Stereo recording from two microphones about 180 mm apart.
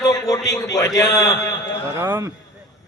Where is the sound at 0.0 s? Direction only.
20° left (ahead or behind).